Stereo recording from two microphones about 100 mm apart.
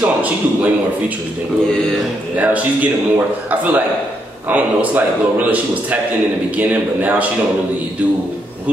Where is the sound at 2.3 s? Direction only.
15° right (ahead or behind).